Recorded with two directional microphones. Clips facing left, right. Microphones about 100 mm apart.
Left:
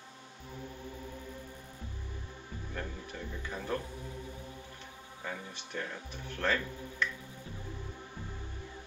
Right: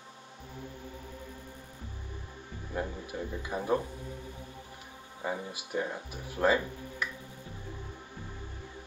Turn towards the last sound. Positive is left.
turn(degrees=-10)  # may be behind; listen again after turning